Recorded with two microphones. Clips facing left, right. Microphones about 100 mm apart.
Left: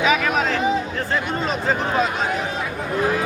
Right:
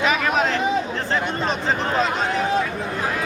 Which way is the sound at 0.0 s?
Centre (ahead or behind).